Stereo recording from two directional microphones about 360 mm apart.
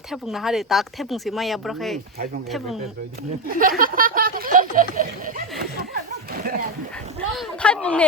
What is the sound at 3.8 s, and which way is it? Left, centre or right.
Snicker, right.